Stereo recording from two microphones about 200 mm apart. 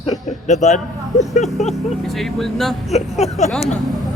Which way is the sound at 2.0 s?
Centre (ahead or behind).